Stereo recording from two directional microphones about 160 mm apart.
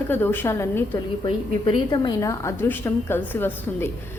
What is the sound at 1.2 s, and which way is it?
A woman's voice, 30° left (ahead or behind).